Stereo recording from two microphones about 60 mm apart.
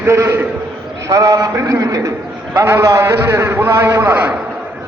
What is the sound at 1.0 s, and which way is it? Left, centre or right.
A man's voice, right.